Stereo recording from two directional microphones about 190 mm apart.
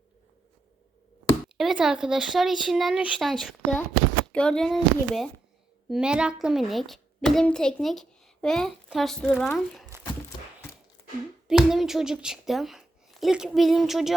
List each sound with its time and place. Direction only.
1.5 s a child's voice: centre (ahead or behind)
11.4 s speech: centre (ahead or behind)